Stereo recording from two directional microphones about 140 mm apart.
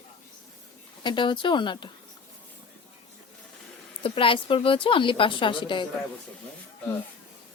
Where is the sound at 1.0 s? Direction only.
35° left (ahead or behind).